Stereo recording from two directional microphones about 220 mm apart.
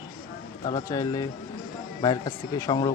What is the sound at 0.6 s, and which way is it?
Speech, 20° left (ahead or behind).